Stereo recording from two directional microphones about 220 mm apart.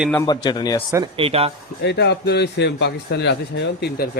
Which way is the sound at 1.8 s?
50° left (ahead or behind).